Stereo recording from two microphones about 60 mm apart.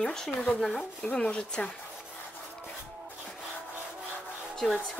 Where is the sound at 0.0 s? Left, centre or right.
Centre.